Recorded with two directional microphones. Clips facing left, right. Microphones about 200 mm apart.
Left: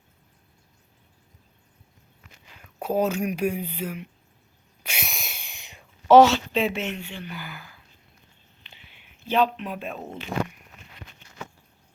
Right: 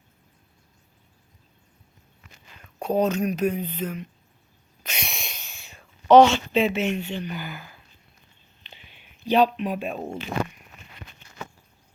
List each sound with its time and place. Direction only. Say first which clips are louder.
2.7 s speech: right 1 dB; 5° left (ahead or behind)
4.8 s sneeze: right 1 dB; 10° left (ahead or behind)
6.1 s speech: even; centre (ahead or behind)
7.0 s speech: right 6 dB; 20° right (ahead or behind)
9.2 s speech: right 3 dB; 15° right (ahead or behind)